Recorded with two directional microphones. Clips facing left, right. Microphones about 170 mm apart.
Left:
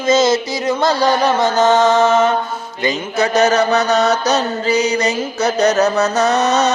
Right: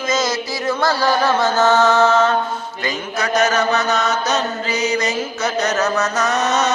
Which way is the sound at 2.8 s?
30° left (ahead or behind).